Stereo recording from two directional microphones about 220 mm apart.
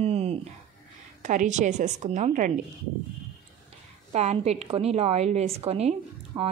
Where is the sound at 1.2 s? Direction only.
35° right (ahead or behind).